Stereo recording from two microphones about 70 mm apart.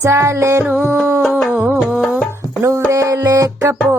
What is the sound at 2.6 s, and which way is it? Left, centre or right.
Music, right.